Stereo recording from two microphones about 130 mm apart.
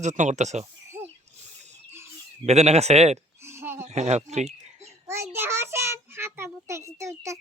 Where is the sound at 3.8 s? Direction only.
60° right (ahead or behind).